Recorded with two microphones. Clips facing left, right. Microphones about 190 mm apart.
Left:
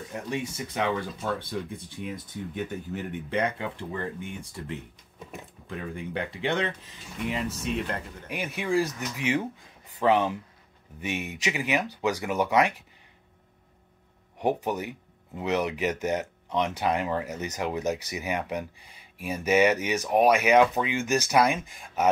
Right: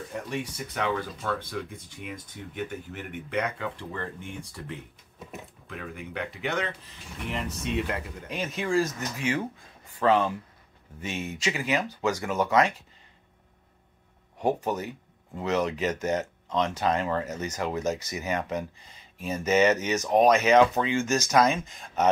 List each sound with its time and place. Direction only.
0.3 s speech: 20° left (ahead or behind)
3.3 s speech: 30° left (ahead or behind)
5.7 s speech: 30° left (ahead or behind)
7.2 s speech: centre (ahead or behind)
8.3 s speech: 10° left (ahead or behind)
14.4 s speech: 15° left (ahead or behind)